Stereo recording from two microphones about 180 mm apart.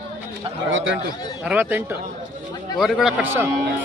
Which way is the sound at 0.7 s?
90° right.